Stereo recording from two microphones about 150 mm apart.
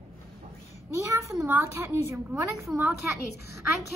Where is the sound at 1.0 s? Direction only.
20° right (ahead or behind).